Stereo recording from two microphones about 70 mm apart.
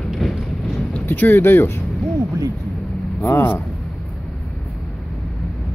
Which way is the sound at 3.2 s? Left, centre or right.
Left.